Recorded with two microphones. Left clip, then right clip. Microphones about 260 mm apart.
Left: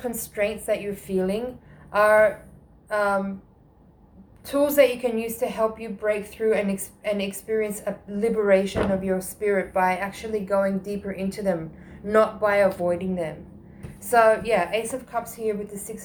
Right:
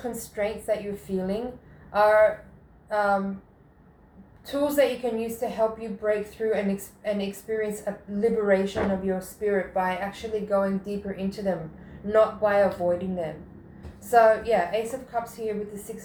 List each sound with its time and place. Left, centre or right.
0.3 s speech: left
4.6 s speech: left